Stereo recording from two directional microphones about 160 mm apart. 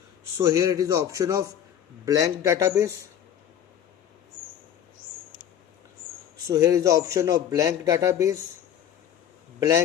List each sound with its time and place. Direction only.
0.3 s a man's voice: 20° right (ahead or behind)
6.5 s a man's voice: 20° right (ahead or behind)
9.6 s a man's voice: 20° right (ahead or behind)